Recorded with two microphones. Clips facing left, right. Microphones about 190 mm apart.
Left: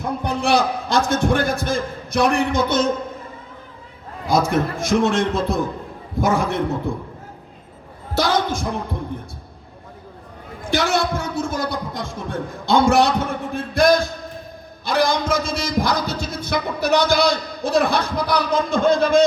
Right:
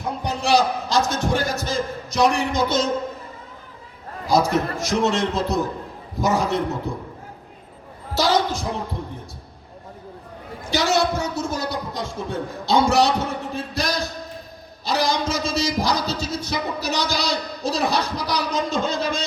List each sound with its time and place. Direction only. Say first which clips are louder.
0.2 s a man's voice: even; 55° left (ahead or behind)
4.3 s a man's voice: left 1 dB; 55° left (ahead or behind)
8.1 s a man's voice: even; 55° left (ahead or behind)
10.7 s a man's voice: even; 55° left (ahead or behind)
13.5 s a sound: left 9 dB; 55° left (ahead or behind)
14.8 s a man's voice: left 3 dB; 55° left (ahead or behind)